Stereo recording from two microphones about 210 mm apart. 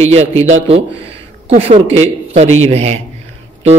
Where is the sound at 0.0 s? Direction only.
30° right (ahead or behind).